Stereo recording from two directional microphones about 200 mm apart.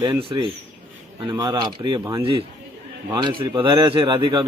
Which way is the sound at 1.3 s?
20° right (ahead or behind).